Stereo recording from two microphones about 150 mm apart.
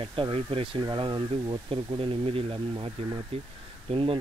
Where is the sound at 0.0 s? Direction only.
35° right (ahead or behind).